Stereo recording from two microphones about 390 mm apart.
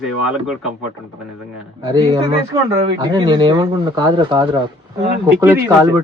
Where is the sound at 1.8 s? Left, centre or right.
Centre.